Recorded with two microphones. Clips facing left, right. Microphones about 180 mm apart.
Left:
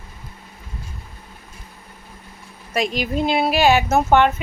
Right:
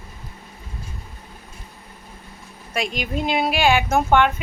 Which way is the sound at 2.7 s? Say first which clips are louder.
Left 4 dB; 40° left (ahead or behind).